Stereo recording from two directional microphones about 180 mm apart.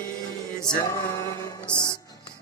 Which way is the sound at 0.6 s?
15° left (ahead or behind).